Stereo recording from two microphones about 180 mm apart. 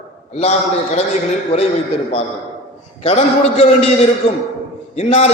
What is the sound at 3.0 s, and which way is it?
Speech, 35° left (ahead or behind).